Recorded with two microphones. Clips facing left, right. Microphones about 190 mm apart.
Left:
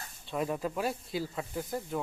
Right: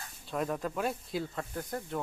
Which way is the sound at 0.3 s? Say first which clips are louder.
Left 1 dB; 5° left (ahead or behind).